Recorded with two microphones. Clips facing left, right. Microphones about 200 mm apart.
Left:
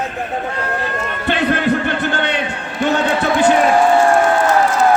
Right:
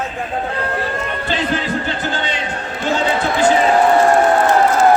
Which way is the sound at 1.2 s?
60° left (ahead or behind).